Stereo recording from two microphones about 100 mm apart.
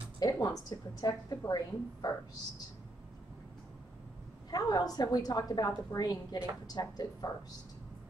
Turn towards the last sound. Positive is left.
turn(degrees=40)  # may be behind; listen again after turning